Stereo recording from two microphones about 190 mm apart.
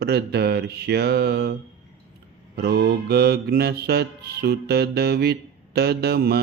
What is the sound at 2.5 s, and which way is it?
Mantra, 60° right (ahead or behind).